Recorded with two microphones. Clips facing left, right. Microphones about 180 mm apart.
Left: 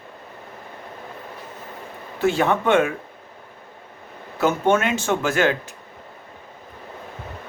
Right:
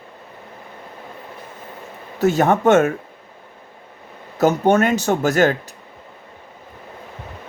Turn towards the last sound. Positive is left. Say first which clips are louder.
# right 4 dB
turn(degrees=-40)  # may be behind; listen again after turning